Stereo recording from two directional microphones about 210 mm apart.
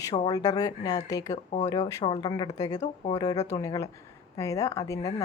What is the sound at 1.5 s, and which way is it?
Speech, 30° left (ahead or behind).